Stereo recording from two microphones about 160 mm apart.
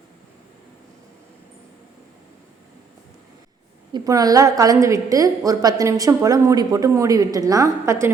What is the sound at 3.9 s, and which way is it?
A woman's voice, 20° right (ahead or behind).